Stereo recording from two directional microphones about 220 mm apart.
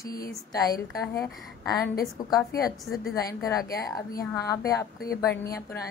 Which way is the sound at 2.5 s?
45° left (ahead or behind).